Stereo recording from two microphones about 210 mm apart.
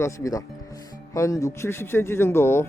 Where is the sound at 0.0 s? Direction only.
15° left (ahead or behind).